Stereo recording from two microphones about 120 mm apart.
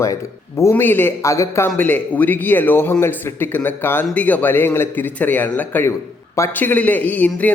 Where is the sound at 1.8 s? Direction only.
15° left (ahead or behind).